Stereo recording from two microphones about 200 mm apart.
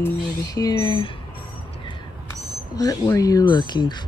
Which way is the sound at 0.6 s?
20° left (ahead or behind).